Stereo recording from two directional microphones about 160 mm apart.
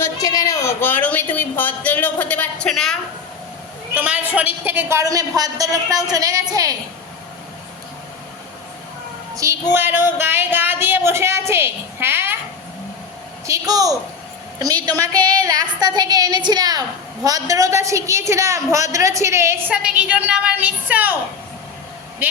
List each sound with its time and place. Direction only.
0.0 s speech: 20° left (ahead or behind); by 3.0 s centre (ahead or behind)
3.9 s a woman's voice: 10° right (ahead or behind)
9.3 s a sound: 20° right (ahead or behind)
9.7 s speech: 15° right (ahead or behind)
13.5 s a woman's voice: 20° right (ahead or behind)
19.7 s speech: 5° right (ahead or behind)